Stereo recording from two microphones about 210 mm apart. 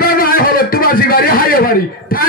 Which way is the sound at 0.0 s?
45° left (ahead or behind).